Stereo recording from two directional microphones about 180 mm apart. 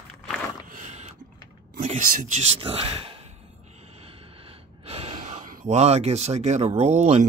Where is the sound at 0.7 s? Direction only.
40° right (ahead or behind).